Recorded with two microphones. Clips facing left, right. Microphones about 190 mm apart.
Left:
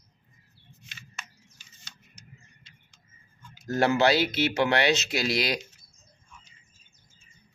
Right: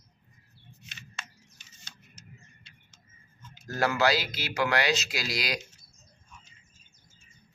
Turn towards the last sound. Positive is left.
turn(degrees=25)  # may be behind; listen again after turning